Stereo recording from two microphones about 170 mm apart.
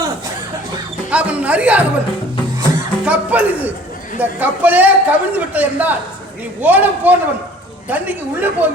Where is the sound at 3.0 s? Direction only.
10° right (ahead or behind).